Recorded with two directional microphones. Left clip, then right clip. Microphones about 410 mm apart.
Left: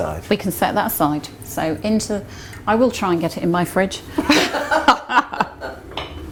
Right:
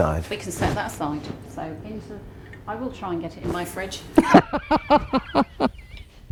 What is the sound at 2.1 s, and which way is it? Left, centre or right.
Speech, left.